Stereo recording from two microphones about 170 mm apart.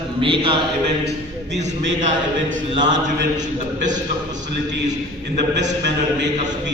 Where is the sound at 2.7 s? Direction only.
25° right (ahead or behind).